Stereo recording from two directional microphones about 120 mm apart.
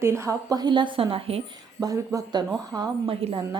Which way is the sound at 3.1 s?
40° right (ahead or behind).